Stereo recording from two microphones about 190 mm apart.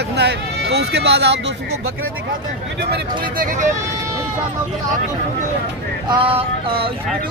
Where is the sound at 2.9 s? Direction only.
45° right (ahead or behind).